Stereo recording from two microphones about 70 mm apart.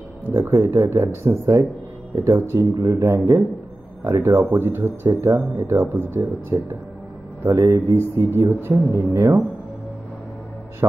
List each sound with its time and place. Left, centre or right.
0.3 s speech: right
8.6 s speech: right
10.8 s a man's voice: right